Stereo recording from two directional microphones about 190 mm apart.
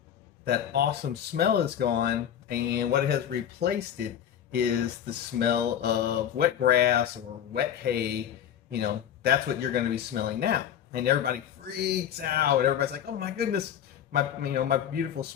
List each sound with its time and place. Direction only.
0.4 s a man's voice: 60° right (ahead or behind)